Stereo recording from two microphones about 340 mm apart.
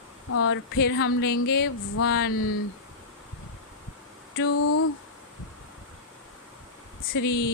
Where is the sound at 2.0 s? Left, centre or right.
Left.